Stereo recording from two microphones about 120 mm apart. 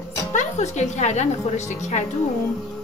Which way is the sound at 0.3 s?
85° left.